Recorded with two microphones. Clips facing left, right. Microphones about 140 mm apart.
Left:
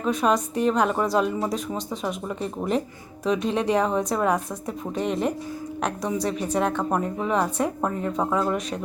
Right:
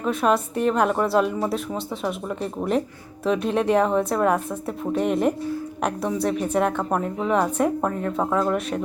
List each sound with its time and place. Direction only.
0.0 s speech: 5° right (ahead or behind)